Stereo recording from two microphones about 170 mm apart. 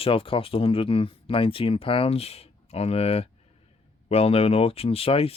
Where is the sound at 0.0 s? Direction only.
30° left (ahead or behind).